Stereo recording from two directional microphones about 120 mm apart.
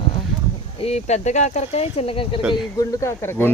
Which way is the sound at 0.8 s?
65° left (ahead or behind).